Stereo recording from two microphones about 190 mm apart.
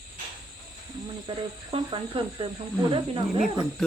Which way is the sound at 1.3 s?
25° right (ahead or behind).